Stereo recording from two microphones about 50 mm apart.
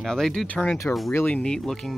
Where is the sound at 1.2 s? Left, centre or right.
Centre.